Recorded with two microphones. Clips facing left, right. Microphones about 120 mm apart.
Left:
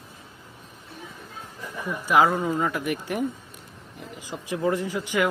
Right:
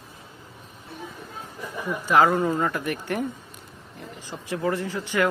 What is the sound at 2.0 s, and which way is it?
Speech, 10° left (ahead or behind).